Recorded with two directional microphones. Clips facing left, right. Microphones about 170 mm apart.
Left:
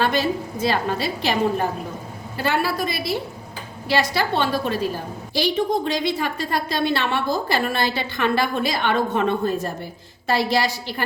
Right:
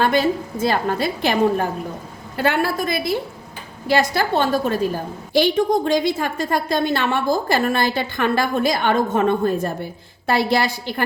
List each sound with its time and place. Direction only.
0.0 s a woman's voice: 50° right (ahead or behind)
2.4 s a woman's voice: 55° right (ahead or behind)